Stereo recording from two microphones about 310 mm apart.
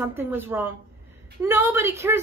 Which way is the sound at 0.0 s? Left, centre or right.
Centre.